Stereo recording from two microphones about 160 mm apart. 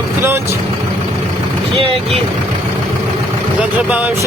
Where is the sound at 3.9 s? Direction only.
10° right (ahead or behind).